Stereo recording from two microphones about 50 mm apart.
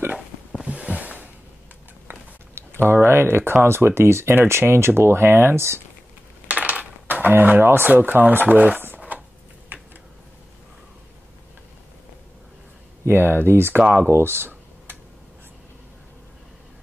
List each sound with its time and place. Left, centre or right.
0.7 s a sound: right
2.0 s a sound: right
3.6 s speech: right
6.4 s coin: right
7.6 s speech: right
8.9 s shuffling cards: right
9.7 s a sound: right
13.0 s speech: right
14.0 s tick-tock: right